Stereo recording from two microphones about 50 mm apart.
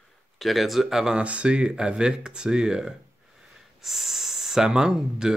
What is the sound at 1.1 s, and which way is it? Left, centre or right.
Speech, right.